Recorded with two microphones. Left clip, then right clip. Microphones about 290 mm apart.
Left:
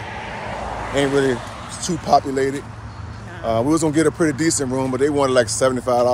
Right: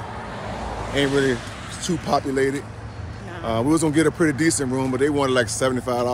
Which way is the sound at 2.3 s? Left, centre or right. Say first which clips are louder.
Left 1 dB; centre.